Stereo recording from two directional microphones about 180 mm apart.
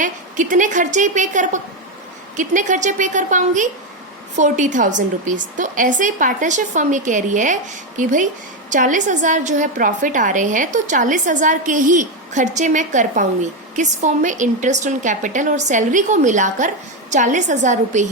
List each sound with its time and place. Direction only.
0.0 s a woman's voice: 45° right (ahead or behind)